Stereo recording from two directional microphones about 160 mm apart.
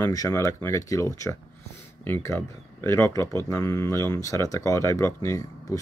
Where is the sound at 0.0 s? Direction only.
20° left (ahead or behind).